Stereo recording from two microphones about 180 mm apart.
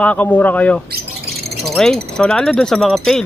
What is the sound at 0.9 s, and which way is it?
Squawk, 60° right (ahead or behind).